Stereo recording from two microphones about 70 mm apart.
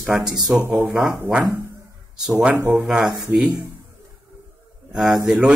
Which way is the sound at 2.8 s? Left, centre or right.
Centre.